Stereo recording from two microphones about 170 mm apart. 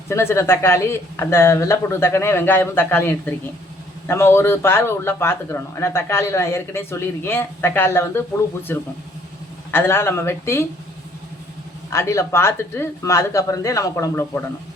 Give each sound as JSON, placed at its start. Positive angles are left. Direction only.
{"t": 0.1, "sound": "a man's voice", "side_deg": 15}
{"t": 11.9, "sound": "a man's voice", "side_deg": 15}